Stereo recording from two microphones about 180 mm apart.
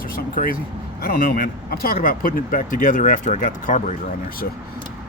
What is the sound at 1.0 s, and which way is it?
Speech, 55° left (ahead or behind).